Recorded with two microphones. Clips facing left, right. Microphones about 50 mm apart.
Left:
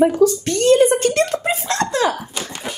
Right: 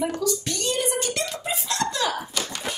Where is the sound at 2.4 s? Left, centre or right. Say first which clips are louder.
Left 2 dB; left.